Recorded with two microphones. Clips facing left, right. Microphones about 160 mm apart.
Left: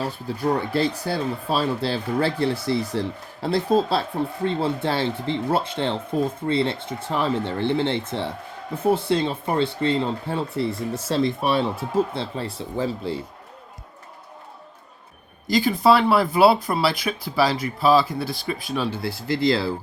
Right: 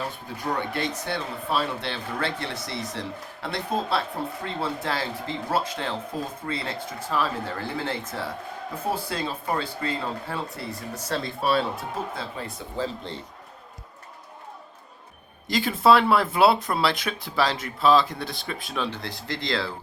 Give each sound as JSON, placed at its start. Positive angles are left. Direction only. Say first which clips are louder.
{"t": 0.7, "sound": "speech", "louder": "left 6 dB", "side_deg": 35}
{"t": 13.0, "sound": "a man's voice", "louder": "left 8 dB", "side_deg": 5}
{"t": 15.4, "sound": "speech", "louder": "left 2 dB", "side_deg": 0}